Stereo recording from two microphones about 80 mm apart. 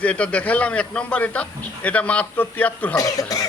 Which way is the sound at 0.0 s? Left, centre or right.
Centre.